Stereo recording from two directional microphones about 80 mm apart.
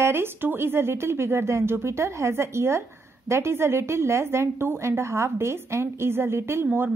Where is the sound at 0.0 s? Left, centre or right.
Right.